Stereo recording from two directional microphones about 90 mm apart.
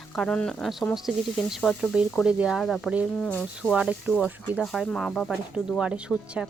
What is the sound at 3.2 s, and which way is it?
Speech, 15° left (ahead or behind).